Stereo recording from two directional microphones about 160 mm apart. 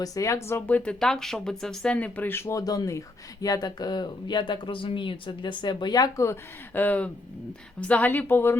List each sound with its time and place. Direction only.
0.0 s speech: 20° left (ahead or behind)